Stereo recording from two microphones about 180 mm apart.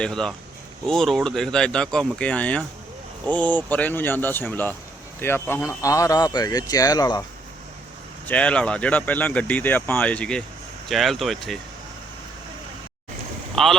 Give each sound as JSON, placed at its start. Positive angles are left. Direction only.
{"t": 0.0, "sound": "speech", "side_deg": 5}
{"t": 8.3, "sound": "speech", "side_deg": 5}
{"t": 13.6, "sound": "speech", "side_deg": 0}